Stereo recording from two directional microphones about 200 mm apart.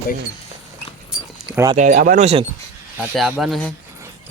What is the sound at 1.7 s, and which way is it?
Speech, 40° right (ahead or behind).